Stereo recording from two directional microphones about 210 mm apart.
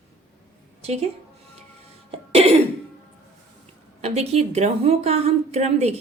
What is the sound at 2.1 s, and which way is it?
Cough, 25° right (ahead or behind).